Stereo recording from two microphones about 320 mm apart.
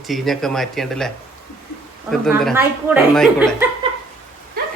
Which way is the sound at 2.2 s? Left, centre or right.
Centre.